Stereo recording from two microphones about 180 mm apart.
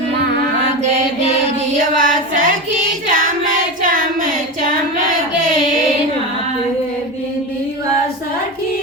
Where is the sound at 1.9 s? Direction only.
50° right (ahead or behind).